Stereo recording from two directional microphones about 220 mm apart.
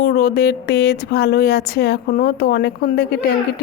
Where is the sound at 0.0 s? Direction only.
45° left (ahead or behind).